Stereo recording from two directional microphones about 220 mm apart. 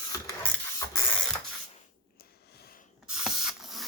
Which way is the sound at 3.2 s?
Centre (ahead or behind).